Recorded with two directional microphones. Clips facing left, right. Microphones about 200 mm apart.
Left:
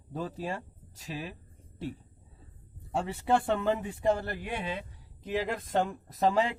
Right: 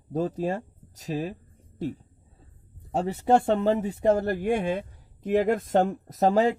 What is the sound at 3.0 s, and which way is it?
Speech, 40° right (ahead or behind).